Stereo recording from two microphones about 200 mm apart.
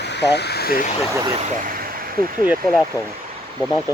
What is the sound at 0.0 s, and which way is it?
Speech, 60° left (ahead or behind).